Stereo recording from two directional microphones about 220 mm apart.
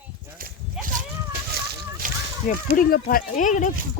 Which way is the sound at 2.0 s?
35° right (ahead or behind).